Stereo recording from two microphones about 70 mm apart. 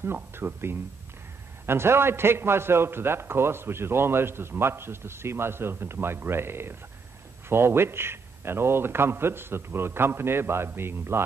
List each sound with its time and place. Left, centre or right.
0.0 s a man's voice: right